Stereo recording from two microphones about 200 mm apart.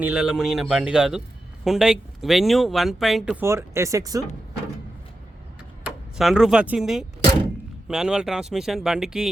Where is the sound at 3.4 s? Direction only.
15° right (ahead or behind).